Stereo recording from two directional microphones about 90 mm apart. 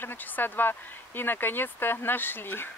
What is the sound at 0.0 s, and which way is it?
Speech, 25° left (ahead or behind).